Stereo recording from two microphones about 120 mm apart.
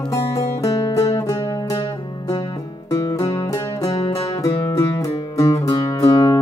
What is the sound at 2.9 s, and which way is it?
Music, 25° left (ahead or behind).